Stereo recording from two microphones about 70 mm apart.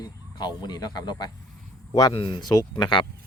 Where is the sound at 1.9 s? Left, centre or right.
Left.